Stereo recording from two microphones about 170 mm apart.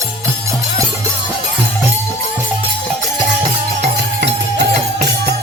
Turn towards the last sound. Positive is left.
turn(degrees=-75)  # may be behind; listen again after turning